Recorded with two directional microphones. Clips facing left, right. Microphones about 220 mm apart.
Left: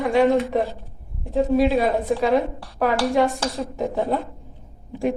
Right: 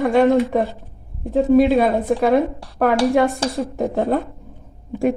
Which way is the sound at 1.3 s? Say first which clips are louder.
Right 5 dB; 55° right (ahead or behind).